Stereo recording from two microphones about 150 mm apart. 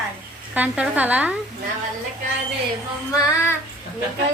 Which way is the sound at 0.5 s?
10° right (ahead or behind).